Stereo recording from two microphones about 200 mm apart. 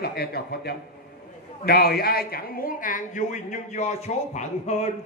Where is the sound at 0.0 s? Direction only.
50° left (ahead or behind).